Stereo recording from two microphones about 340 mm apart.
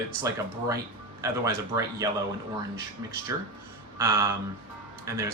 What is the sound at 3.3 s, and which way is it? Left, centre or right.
Speech, centre.